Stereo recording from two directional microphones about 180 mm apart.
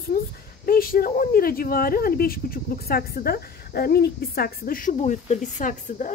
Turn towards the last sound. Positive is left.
turn(degrees=45)  # may be behind; listen again after turning